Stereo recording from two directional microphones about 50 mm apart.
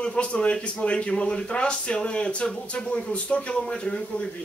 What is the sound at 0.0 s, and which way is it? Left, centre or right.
Speech, left.